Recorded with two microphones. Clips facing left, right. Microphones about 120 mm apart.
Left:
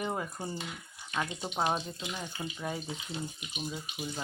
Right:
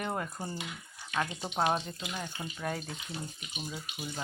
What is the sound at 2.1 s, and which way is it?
Speech, centre (ahead or behind).